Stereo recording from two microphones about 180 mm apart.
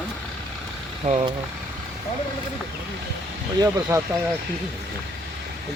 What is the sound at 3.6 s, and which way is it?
Speech, 15° right (ahead or behind).